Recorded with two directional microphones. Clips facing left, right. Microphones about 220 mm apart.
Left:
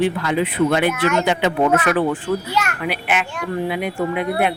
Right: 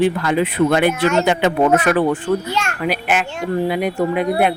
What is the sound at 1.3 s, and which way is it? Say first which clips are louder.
Speech: right 2 dB; 45° right (ahead or behind).